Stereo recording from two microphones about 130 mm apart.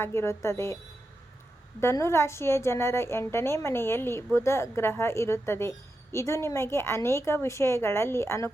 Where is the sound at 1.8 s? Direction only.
20° left (ahead or behind).